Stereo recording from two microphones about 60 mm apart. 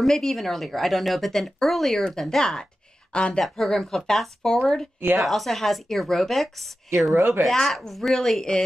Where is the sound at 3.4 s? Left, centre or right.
Centre.